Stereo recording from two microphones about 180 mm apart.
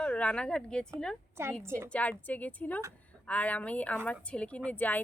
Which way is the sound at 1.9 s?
10° left (ahead or behind).